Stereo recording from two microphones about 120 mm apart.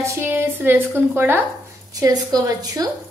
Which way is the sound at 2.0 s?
30° right (ahead or behind).